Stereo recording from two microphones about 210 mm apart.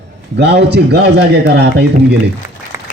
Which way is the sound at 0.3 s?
50° right (ahead or behind).